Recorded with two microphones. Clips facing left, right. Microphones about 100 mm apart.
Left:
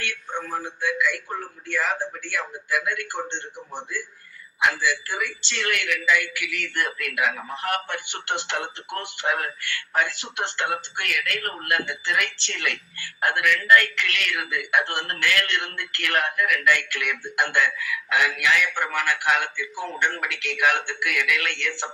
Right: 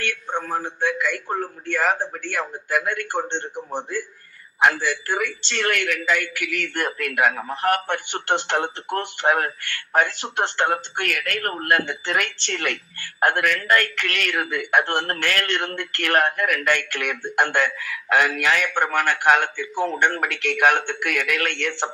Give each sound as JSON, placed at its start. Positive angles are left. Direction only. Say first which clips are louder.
{"t": 0.0, "sound": "a man's voice", "louder": "right 4 dB", "side_deg": -50}